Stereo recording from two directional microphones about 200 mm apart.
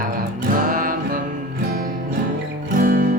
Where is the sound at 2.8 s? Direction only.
45° right (ahead or behind).